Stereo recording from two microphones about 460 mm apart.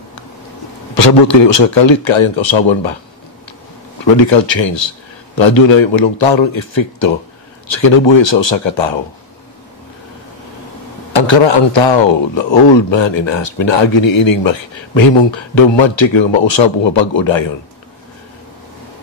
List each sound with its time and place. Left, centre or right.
0.9 s speech: left
4.5 s a man's voice: left
11.1 s a man's voice: left